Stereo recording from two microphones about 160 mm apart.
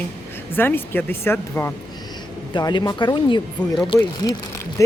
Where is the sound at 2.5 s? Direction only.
30° left (ahead or behind).